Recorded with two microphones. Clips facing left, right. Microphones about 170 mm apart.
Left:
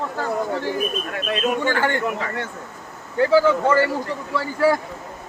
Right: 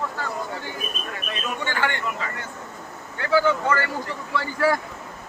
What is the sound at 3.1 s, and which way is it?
Speech, 35° left (ahead or behind).